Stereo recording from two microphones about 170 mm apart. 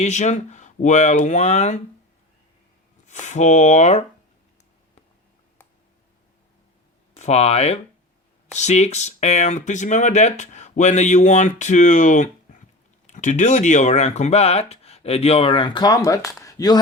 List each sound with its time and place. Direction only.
0.0 s speech: 45° left (ahead or behind)
3.1 s speech: 45° left (ahead or behind)
7.2 s speech: 40° left (ahead or behind); by 16.8 s 20° left (ahead or behind)